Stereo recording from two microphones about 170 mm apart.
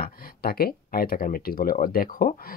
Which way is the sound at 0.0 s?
60° left (ahead or behind).